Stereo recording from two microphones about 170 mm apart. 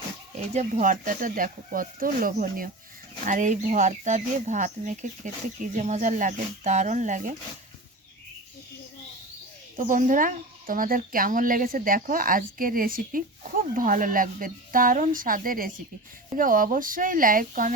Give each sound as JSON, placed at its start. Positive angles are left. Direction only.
{"t": 0.5, "sound": "speech", "side_deg": -50}
{"t": 9.7, "sound": "speech", "side_deg": -50}